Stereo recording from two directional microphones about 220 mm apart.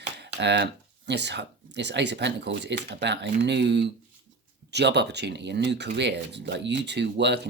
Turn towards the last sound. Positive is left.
turn(degrees=-50)  # may be behind; listen again after turning